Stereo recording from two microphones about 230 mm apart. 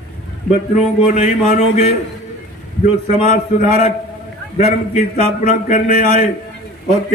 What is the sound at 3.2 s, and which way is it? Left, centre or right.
Speech, left.